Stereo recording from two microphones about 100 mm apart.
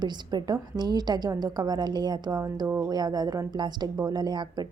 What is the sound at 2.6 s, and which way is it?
Speech, 20° right (ahead or behind).